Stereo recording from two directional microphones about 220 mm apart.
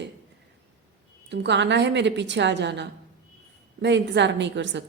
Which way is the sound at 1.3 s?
50° right (ahead or behind).